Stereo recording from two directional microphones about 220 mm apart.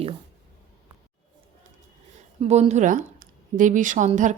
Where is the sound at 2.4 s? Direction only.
30° right (ahead or behind).